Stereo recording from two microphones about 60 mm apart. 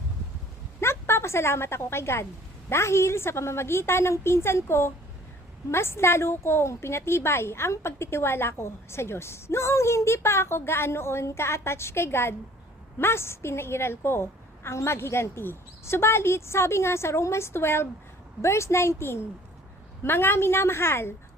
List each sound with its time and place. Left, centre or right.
0.8 s a woman's voice: left